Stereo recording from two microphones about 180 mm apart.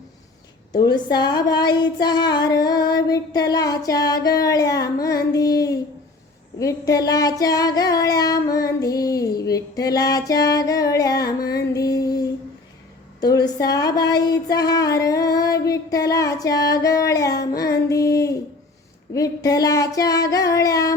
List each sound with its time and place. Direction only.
0.9 s child singing: 25° left (ahead or behind)
13.4 s child singing: 20° left (ahead or behind)
14.9 s female singing: 20° left (ahead or behind)
16.7 s child singing: 20° left (ahead or behind)
17.7 s music: 20° left (ahead or behind)
19.1 s child singing: 20° left (ahead or behind)